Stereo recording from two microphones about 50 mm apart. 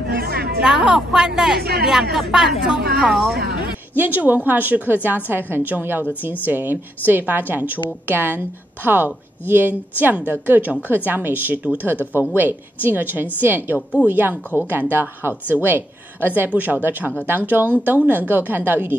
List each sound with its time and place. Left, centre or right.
0.6 s a woman's voice: centre
3.9 s a woman's voice: right
12.0 s speech: left
12.4 s a woman's voice: right